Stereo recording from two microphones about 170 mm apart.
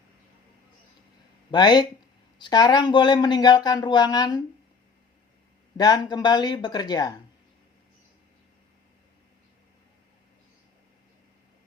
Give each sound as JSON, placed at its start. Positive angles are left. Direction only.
{"t": 1.5, "sound": "speech", "side_deg": 25}
{"t": 5.7, "sound": "speech", "side_deg": 25}